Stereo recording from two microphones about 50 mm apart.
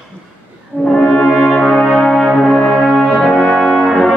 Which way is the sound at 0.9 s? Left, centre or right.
Centre.